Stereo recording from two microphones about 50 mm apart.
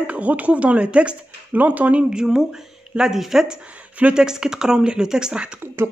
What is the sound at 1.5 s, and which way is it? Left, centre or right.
Speech, right.